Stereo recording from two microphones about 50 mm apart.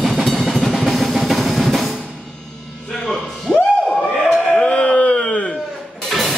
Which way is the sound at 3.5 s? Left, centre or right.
Centre.